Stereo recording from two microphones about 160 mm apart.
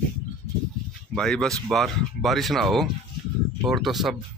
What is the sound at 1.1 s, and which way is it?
Speech, 5° left (ahead or behind).